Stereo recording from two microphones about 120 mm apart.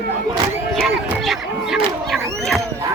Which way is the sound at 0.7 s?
Centre (ahead or behind).